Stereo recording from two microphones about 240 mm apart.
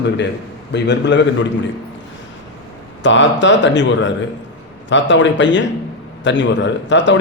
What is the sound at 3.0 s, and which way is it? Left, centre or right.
Speech, left.